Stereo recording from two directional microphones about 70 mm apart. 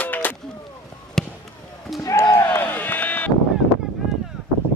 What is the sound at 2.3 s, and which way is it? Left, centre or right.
Run, left.